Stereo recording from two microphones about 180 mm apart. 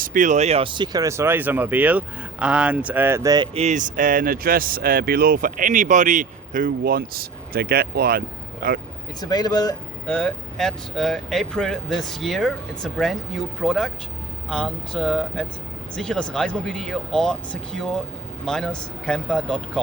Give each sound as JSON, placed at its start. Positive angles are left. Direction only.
{"t": 0.0, "sound": "speech", "side_deg": -45}
{"t": 9.2, "sound": "speech", "side_deg": 20}
{"t": 10.1, "sound": "speech", "side_deg": 5}